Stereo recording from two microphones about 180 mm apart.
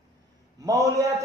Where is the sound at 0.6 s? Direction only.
20° right (ahead or behind).